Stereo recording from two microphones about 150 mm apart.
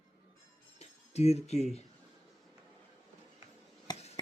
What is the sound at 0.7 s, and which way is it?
Speech, 45° left (ahead or behind).